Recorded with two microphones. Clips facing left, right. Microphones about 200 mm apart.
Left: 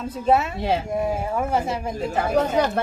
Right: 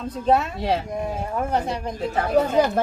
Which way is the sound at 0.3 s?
Centre (ahead or behind).